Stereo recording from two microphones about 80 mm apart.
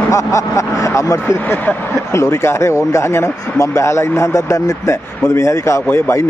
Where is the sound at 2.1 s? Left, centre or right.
Left.